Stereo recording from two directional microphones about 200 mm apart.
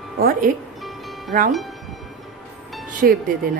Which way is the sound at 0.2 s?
45° right (ahead or behind).